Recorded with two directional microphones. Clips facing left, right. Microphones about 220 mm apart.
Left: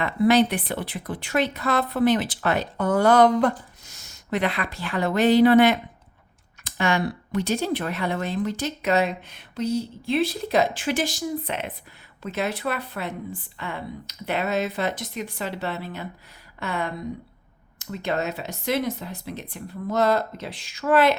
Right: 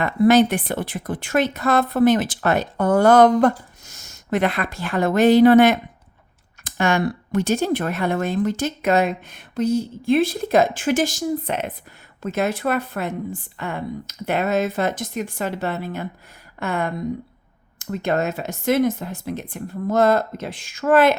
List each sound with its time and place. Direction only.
0.0 s speech: 45° right (ahead or behind)